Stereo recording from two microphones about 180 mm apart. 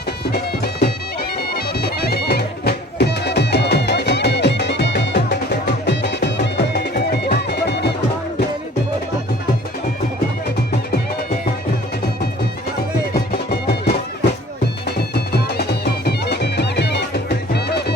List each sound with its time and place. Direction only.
0.3 s music: 60° left (ahead or behind)
1.4 s bagpipes: 60° left (ahead or behind)
13.1 s music: 60° left (ahead or behind)